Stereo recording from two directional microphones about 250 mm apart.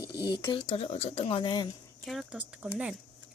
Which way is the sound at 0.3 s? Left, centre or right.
Centre.